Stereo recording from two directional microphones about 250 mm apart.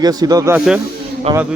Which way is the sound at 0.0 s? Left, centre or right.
Centre.